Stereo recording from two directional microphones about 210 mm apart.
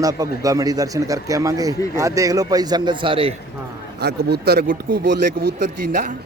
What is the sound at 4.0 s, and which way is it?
Speech, 50° right (ahead or behind).